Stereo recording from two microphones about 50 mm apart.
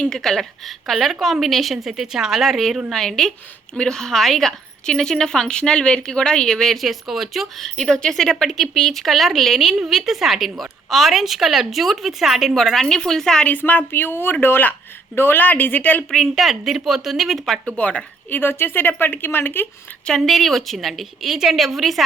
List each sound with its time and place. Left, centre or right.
0.1 s a woman's voice: centre
7.8 s speech: centre
8.2 s speech: centre
12.5 s speech: centre
13.5 s a woman's voice: left
16.1 s speech: centre
17.7 s speech: left
18.3 s speech: left
20.1 s speech: centre